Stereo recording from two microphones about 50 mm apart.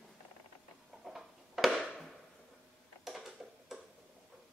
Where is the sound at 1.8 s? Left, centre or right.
Centre.